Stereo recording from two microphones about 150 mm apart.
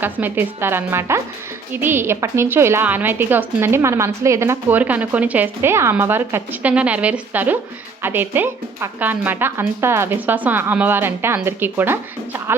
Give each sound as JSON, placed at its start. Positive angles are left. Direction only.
{"t": 0.0, "sound": "a woman's voice", "side_deg": -15}